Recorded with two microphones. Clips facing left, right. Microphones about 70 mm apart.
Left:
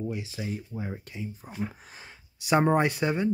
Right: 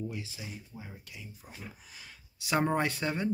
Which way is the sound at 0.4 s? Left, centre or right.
Left.